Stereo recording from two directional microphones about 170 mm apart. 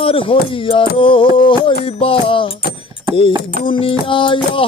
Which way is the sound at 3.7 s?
30° left (ahead or behind).